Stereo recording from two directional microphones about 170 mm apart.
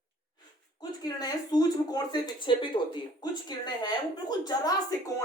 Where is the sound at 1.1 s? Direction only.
25° left (ahead or behind).